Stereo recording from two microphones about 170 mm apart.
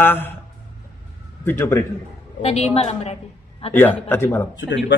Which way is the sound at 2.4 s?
40° left (ahead or behind).